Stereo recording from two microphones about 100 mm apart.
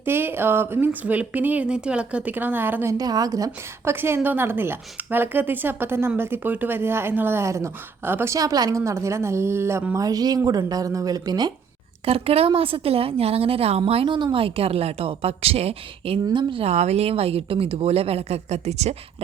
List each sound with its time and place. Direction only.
0.0 s a woman's voice: 20° right (ahead or behind)
3.0 s speech: 40° right (ahead or behind)
3.9 s speech: 20° right (ahead or behind)
8.4 s speech: 40° right (ahead or behind)
9.9 s speech: 35° right (ahead or behind)
12.0 s speech: 80° right
12.5 s a woman's voice: 65° right (ahead or behind); by 16.2 s 85° right
16.3 s speech: 55° right (ahead or behind); by 18.9 s 90° right